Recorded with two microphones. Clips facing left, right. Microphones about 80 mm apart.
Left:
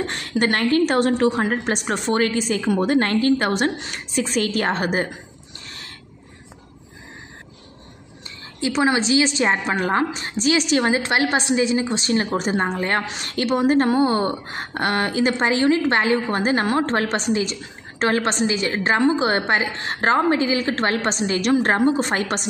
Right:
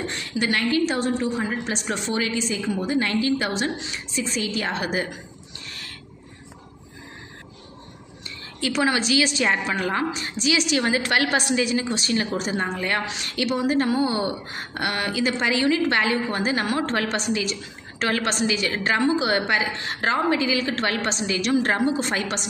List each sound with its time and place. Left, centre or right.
0.0 s a woman's voice: left
8.5 s a woman's voice: left
10.8 s a woman's voice: left